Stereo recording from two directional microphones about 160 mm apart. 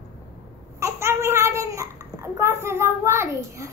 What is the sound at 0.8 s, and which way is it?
Babbling, 15° right (ahead or behind).